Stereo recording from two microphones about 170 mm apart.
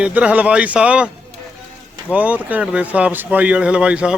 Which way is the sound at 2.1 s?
10° right (ahead or behind).